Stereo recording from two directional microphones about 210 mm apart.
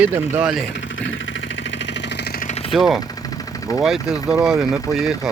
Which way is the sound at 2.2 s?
45° left (ahead or behind).